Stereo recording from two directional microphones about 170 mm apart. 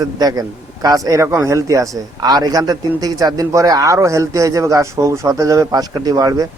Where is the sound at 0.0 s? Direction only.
20° right (ahead or behind).